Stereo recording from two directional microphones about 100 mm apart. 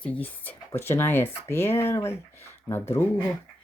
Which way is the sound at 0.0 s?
15° left (ahead or behind).